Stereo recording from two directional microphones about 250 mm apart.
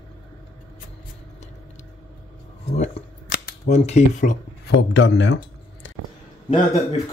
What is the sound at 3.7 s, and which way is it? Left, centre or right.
Speech, left.